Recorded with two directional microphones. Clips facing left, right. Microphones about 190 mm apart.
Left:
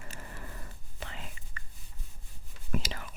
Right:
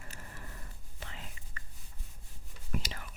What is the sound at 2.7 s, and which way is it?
Whispering, 90° left.